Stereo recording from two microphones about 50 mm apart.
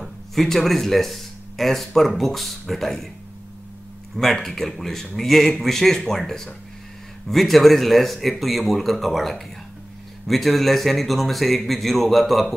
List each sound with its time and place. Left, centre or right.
0.0 s speech: centre
4.2 s speech: centre